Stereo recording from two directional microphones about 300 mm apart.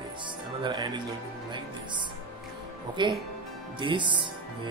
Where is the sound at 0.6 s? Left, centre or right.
Centre.